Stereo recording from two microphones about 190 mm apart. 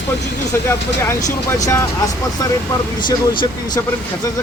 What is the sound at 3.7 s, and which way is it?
Speech, 20° left (ahead or behind).